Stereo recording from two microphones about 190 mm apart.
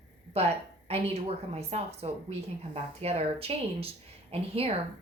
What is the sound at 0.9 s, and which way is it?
Speech, 30° right (ahead or behind).